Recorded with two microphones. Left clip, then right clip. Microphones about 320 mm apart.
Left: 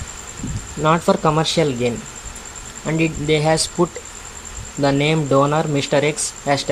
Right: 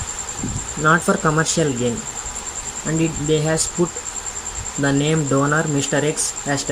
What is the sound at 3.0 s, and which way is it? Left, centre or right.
Speech, centre.